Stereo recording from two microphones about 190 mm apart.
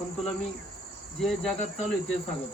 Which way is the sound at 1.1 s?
5° left (ahead or behind).